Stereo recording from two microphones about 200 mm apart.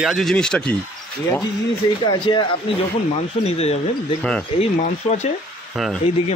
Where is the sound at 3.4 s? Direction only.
30° left (ahead or behind).